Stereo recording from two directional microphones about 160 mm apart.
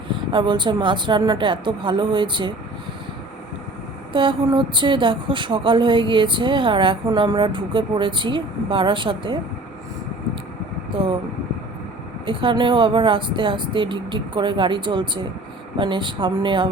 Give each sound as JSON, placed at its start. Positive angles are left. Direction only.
{"t": 0.1, "sound": "speech", "side_deg": -30}
{"t": 4.1, "sound": "speech", "side_deg": -30}
{"t": 12.2, "sound": "speech", "side_deg": -30}